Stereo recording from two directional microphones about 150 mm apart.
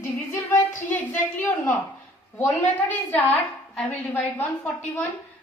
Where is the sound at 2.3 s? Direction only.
10° left (ahead or behind).